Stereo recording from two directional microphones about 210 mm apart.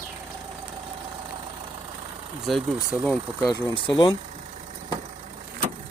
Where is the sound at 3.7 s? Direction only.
20° left (ahead or behind).